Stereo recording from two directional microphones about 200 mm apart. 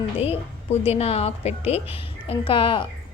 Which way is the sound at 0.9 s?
30° left (ahead or behind).